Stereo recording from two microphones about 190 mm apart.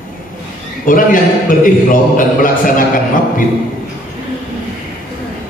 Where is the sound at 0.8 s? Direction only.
45° left (ahead or behind).